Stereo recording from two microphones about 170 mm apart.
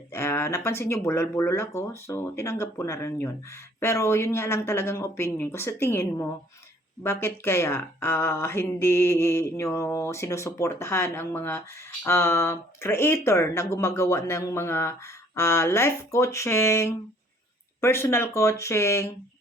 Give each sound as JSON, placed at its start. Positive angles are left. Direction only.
{"t": 0.1, "sound": "speech", "side_deg": 15}